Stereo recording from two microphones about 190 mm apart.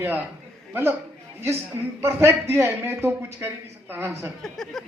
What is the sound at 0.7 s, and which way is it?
Speech, 10° right (ahead or behind).